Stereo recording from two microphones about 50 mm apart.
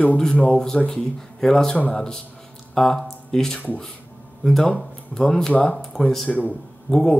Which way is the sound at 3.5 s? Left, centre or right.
Left.